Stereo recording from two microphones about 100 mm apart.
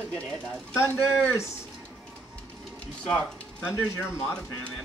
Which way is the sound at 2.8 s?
10° left (ahead or behind).